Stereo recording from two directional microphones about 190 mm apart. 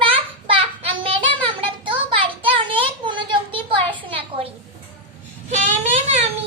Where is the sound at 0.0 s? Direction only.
30° right (ahead or behind).